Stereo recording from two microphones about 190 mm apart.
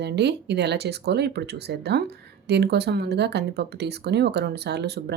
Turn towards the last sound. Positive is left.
turn(degrees=-60)  # may be behind; listen again after turning